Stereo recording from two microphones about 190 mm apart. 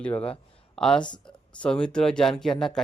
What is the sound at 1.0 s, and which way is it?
Speech, 25° left (ahead or behind).